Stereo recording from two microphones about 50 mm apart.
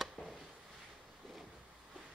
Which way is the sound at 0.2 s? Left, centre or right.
Centre.